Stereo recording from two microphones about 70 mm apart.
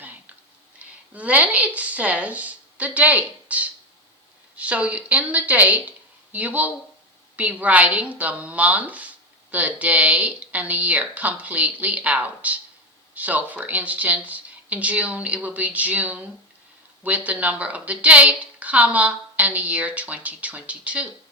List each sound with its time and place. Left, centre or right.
0.8 s a woman's voice: centre